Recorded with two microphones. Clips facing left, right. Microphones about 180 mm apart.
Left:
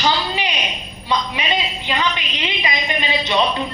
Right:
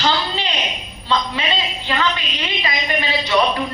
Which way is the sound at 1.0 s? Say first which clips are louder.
Right 1 dB; 15° left (ahead or behind).